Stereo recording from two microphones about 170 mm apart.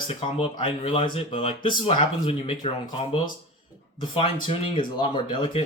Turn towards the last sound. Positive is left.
turn(degrees=30)  # may be behind; listen again after turning